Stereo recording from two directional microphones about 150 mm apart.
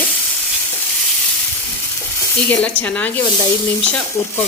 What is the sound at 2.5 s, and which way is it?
A woman's voice, 10° left (ahead or behind).